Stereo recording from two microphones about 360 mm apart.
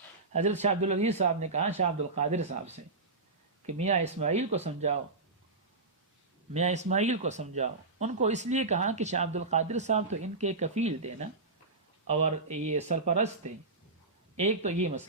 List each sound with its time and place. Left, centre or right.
0.3 s speech: centre
6.5 s speech: centre
14.3 s speech: centre